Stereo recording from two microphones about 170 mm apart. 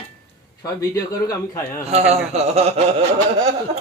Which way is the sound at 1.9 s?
35° right (ahead or behind).